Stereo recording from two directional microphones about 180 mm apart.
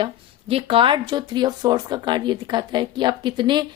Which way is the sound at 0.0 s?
30° right (ahead or behind).